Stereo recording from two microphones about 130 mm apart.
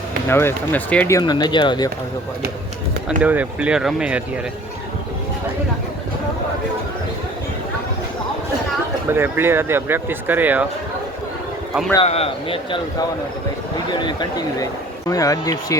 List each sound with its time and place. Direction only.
0.3 s speech: 20° left (ahead or behind)
1.2 s speech: 35° left (ahead or behind)
3.2 s speech: 10° right (ahead or behind)
9.0 s speech: 15° right (ahead or behind)
12.0 s speech: 50° left (ahead or behind)
14.0 s speech: 30° left (ahead or behind)